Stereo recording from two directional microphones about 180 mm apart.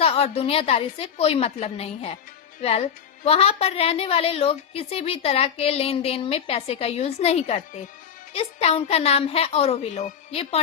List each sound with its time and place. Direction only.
0.0 s a woman's voice: 35° left (ahead or behind)